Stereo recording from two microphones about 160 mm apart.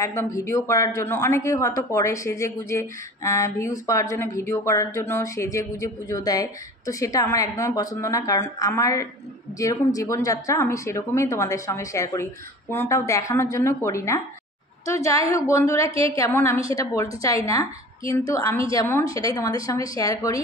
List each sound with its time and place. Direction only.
0.0 s a woman's voice: 20° left (ahead or behind)